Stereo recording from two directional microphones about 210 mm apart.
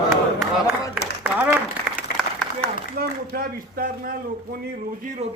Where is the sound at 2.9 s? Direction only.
45° right (ahead or behind).